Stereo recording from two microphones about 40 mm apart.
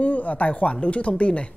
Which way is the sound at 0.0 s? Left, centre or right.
Left.